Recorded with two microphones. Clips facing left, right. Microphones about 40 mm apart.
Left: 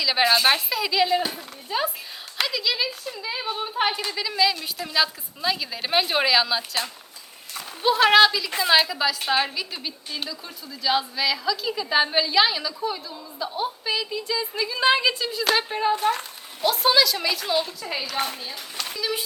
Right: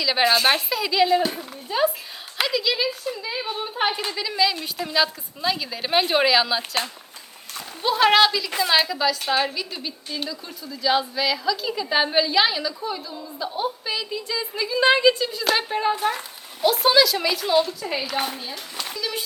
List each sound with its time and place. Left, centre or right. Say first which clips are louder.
0.0 s a woman's voice: right 1 dB; centre
6.6 s speech: right 2 dB; right
7.9 s a woman's voice: even; centre